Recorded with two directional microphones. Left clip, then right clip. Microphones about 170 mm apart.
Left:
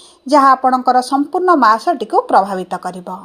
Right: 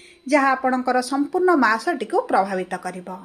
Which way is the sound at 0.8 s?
15° left (ahead or behind).